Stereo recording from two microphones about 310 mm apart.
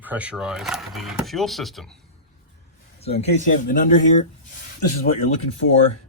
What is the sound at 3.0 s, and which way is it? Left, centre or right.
Speech, centre.